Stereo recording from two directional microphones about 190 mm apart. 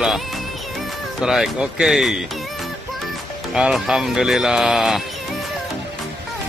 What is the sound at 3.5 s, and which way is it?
Speech, 5° right (ahead or behind).